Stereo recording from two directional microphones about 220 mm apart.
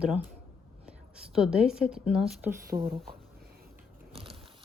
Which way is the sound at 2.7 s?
25° right (ahead or behind).